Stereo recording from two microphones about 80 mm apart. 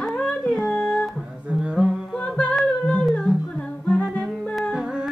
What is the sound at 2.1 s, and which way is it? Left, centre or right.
Music, centre.